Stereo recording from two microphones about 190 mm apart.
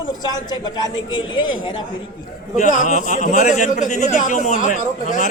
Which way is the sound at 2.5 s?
40° left (ahead or behind).